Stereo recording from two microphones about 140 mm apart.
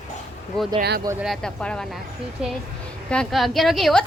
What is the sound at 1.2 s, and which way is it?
Speech, centre (ahead or behind).